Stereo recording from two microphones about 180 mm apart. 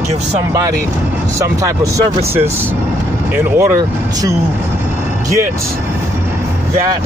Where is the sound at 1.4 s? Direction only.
15° right (ahead or behind).